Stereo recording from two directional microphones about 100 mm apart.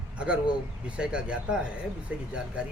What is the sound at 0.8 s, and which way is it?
Speech, 10° right (ahead or behind).